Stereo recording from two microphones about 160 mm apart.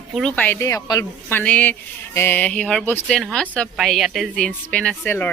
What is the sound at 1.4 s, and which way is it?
A woman's voice, 10° left (ahead or behind).